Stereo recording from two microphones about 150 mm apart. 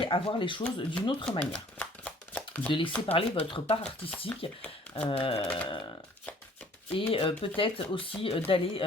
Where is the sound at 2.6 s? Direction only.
35° left (ahead or behind).